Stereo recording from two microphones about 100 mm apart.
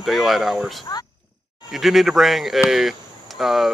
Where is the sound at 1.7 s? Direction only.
Centre (ahead or behind).